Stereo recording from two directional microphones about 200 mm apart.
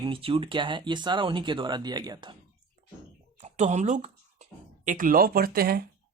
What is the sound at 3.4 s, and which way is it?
Speech, 35° right (ahead or behind).